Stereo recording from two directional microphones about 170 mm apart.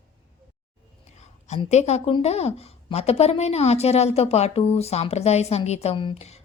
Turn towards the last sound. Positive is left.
turn(degrees=40)  # may be behind; listen again after turning